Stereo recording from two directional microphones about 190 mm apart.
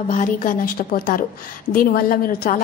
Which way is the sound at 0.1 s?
40° left (ahead or behind).